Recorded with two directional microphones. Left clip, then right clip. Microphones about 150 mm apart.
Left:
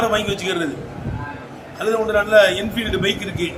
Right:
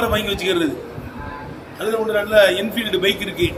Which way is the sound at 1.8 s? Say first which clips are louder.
Left 2 dB; 10° left (ahead or behind).